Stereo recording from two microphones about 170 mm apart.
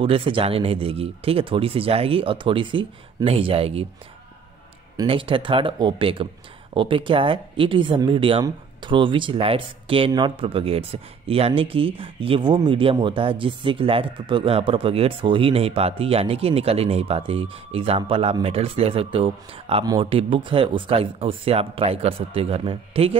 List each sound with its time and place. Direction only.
0.0 s speech: 35° right (ahead or behind)
4.9 s a man's voice: 30° right (ahead or behind)